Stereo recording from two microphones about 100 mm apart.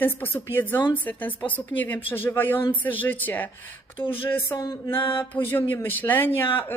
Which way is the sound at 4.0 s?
60° left (ahead or behind).